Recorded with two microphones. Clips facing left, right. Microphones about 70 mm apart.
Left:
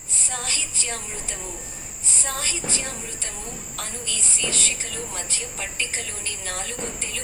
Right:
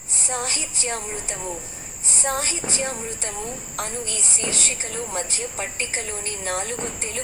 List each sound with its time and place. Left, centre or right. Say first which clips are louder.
0.2 s a woman's voice: right 3 dB; right